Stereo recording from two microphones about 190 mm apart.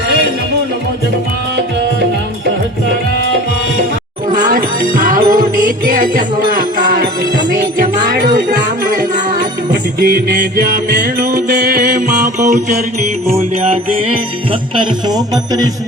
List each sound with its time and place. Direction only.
4.5 s music: 45° right (ahead or behind)
8.1 s music: 50° right (ahead or behind)
10.0 s music: 55° right (ahead or behind)
11.0 s music: 45° right (ahead or behind)
11.5 s music: 55° right (ahead or behind)
13.3 s music: 35° right (ahead or behind)
14.8 s speech: 20° right (ahead or behind)